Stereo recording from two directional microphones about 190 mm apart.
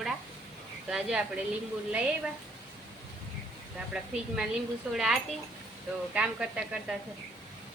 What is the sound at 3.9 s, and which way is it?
A woman's voice, 5° right (ahead or behind).